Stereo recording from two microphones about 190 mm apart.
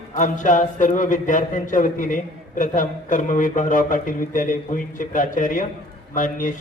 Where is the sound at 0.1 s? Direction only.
40° left (ahead or behind).